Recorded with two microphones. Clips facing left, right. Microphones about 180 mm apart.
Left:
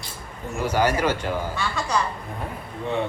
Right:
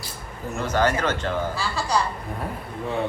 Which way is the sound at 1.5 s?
30° right (ahead or behind).